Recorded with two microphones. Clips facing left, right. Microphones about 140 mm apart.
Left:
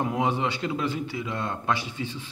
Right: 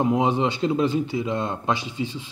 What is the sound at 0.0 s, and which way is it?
A man's voice, 20° right (ahead or behind).